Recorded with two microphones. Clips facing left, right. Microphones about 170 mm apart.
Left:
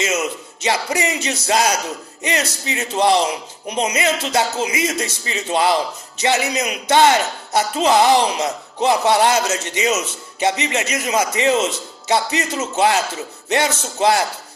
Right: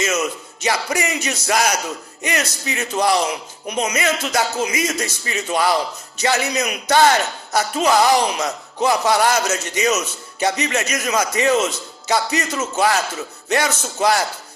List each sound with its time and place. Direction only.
0.0 s speech: 25° left (ahead or behind)